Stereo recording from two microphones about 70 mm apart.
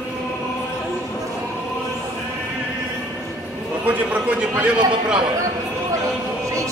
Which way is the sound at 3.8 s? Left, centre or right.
Right.